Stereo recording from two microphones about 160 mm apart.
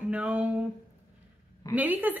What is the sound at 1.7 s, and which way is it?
Speech, 10° right (ahead or behind).